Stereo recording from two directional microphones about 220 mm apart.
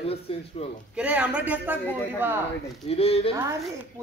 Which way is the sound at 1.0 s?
5° right (ahead or behind).